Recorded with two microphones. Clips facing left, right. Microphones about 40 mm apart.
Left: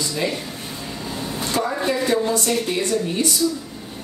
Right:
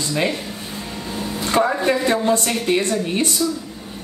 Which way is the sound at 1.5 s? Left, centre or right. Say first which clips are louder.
Right 6 dB; right.